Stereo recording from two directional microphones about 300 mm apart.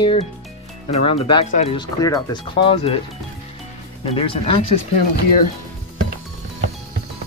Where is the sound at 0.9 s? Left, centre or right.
Centre.